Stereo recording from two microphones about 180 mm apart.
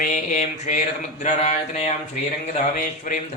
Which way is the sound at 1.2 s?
40° left (ahead or behind).